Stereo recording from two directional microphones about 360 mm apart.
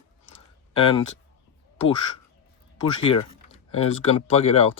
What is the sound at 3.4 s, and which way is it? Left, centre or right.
Speech, centre.